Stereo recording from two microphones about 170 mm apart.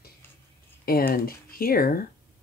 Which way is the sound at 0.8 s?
60° left (ahead or behind).